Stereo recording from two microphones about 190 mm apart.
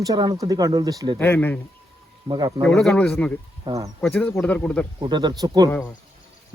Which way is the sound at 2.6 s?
5° left (ahead or behind).